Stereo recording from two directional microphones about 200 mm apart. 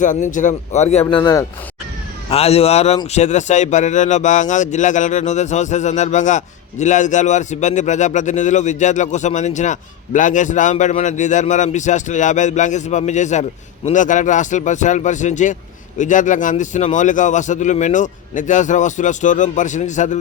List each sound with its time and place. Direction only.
0.0 s speech: 40° left (ahead or behind); by 1.5 s 20° left (ahead or behind)
2.3 s speech: 30° left (ahead or behind)